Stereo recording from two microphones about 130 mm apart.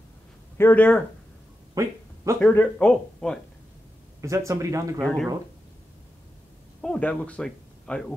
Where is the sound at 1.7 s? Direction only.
25° right (ahead or behind).